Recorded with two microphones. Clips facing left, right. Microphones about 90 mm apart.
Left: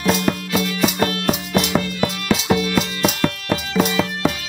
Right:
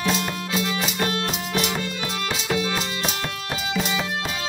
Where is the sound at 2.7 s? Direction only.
80° left.